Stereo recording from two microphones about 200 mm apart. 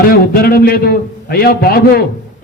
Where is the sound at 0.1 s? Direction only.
45° left (ahead or behind).